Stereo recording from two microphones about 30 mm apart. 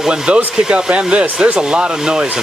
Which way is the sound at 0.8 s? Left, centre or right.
Right.